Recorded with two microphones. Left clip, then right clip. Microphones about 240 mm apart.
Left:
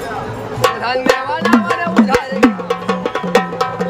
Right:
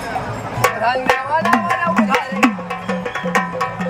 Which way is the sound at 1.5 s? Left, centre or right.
Left.